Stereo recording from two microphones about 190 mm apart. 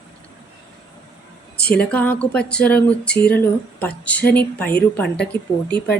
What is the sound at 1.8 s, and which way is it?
Speech, 10° left (ahead or behind).